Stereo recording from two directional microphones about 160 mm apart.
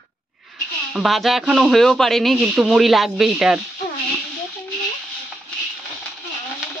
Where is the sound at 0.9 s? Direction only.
Centre (ahead or behind).